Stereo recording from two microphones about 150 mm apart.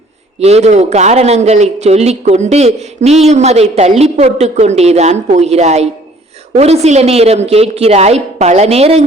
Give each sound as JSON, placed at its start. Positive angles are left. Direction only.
{"t": 0.3, "sound": "a woman's voice", "side_deg": -45}